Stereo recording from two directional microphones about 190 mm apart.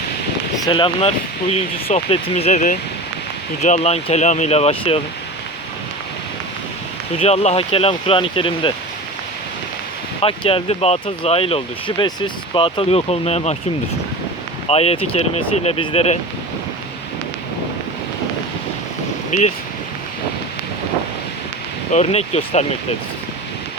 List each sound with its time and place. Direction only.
0.6 s speech: 25° left (ahead or behind)
7.2 s speech: 35° left (ahead or behind)
10.2 s speech: 30° left (ahead or behind)
14.7 s speech: 30° left (ahead or behind)
19.3 s speech: 40° left (ahead or behind)
21.9 s speech: 35° left (ahead or behind)